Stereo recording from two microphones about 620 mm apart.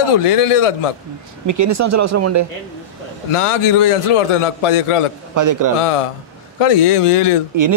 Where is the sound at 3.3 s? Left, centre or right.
Left.